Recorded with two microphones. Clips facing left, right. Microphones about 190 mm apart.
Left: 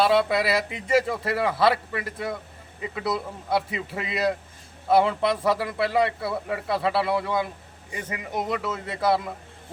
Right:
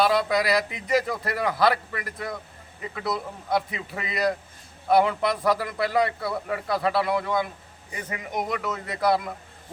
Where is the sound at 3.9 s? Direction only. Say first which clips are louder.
Left 1 dB; centre (ahead or behind).